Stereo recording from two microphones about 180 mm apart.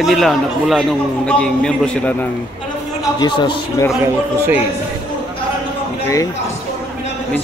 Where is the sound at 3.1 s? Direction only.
25° left (ahead or behind).